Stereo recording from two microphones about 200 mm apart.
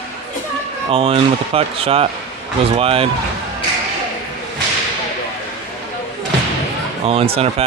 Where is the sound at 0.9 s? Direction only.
25° right (ahead or behind).